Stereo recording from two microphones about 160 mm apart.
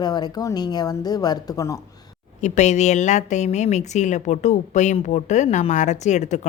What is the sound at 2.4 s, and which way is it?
A woman's voice, 45° left (ahead or behind).